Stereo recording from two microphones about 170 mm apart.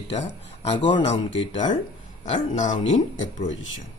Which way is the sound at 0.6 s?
30° left (ahead or behind).